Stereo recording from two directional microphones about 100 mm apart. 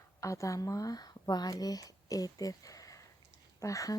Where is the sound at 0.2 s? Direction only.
35° left (ahead or behind).